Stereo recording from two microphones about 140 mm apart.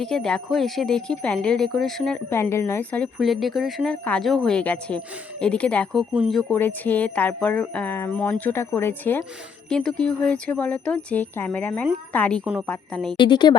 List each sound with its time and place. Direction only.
0.0 s speech: 5° left (ahead or behind)
2.3 s speech: 15° left (ahead or behind)
3.2 s speech: centre (ahead or behind)
6.5 s speech: 10° left (ahead or behind)
13.1 s a woman's voice: 30° left (ahead or behind)